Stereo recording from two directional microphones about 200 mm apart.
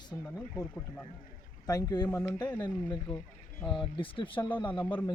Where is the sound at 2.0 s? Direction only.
5° left (ahead or behind).